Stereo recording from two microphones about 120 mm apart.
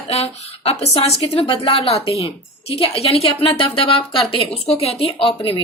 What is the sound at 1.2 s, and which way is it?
A woman's voice, 45° left (ahead or behind).